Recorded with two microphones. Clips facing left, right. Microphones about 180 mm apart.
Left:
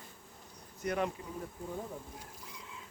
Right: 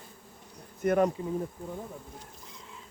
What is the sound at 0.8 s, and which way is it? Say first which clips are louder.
Speech: right 9 dB; 45° right (ahead or behind).